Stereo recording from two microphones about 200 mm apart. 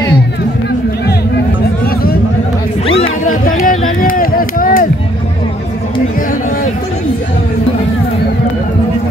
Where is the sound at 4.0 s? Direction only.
45° left (ahead or behind).